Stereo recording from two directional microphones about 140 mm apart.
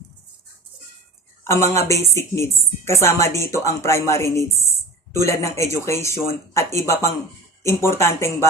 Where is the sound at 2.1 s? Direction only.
20° left (ahead or behind).